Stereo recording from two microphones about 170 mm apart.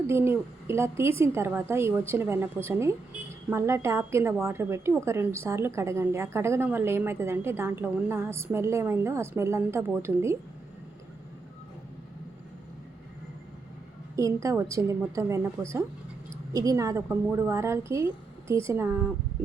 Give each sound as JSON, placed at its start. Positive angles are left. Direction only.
{"t": 0.1, "sound": "a woman's voice", "side_deg": -15}
{"t": 14.2, "sound": "a woman's voice", "side_deg": -20}
{"t": 15.6, "sound": "speech", "side_deg": -5}
{"t": 16.5, "sound": "a woman's voice", "side_deg": -20}